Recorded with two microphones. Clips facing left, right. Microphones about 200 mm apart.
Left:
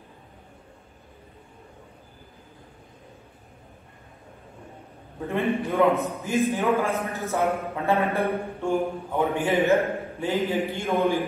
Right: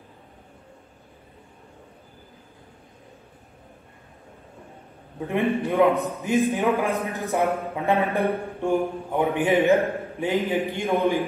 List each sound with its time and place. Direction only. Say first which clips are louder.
5.3 s a man's voice: right 2 dB; 15° right (ahead or behind)